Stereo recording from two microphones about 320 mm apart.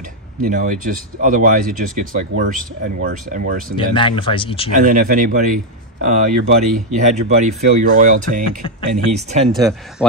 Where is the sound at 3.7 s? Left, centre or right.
Centre.